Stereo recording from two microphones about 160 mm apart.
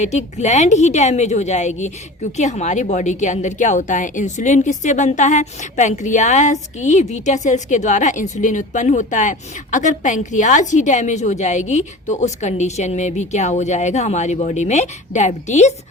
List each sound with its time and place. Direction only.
0.0 s a woman's voice: 45° left (ahead or behind)